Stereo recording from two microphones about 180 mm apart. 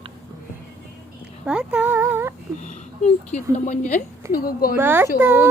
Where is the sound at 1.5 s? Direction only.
5° right (ahead or behind).